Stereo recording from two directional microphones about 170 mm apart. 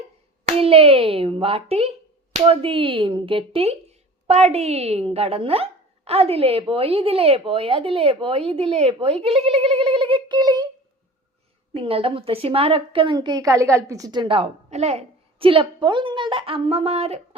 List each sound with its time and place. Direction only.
0.4 s speech: 35° right (ahead or behind)
11.7 s speech: 35° right (ahead or behind)